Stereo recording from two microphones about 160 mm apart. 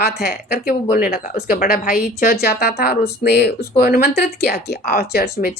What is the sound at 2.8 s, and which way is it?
Speech, 85° left.